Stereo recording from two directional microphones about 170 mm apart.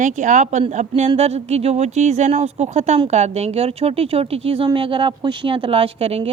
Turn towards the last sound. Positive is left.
turn(degrees=-35)  # may be behind; listen again after turning